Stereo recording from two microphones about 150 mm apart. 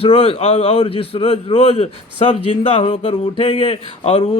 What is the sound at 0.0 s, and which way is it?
A man's voice, 40° left (ahead or behind).